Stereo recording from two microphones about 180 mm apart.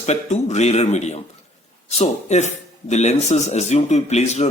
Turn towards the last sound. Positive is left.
turn(degrees=40)  # may be behind; listen again after turning